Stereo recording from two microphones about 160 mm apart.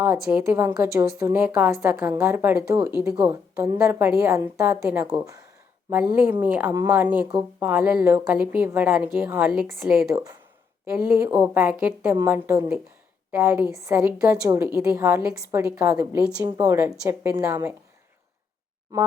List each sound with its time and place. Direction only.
0.0 s a woman's voice: 10° right (ahead or behind)
5.9 s a woman's voice: 10° right (ahead or behind)